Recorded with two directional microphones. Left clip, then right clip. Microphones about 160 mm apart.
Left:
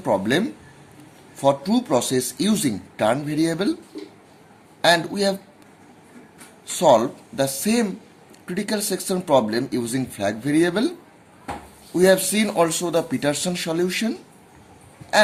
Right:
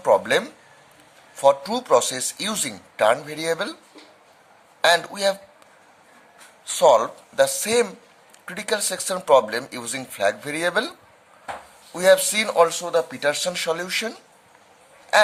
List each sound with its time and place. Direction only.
0.0 s speech: 30° right (ahead or behind)
4.8 s speech: 35° right (ahead or behind)
6.9 s speech: 35° right (ahead or behind)
11.9 s speech: 35° right (ahead or behind)
12.6 s speech: 15° right (ahead or behind)